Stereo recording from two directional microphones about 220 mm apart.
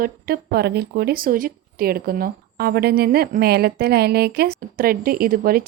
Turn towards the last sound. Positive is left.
turn(degrees=-40)  # may be behind; listen again after turning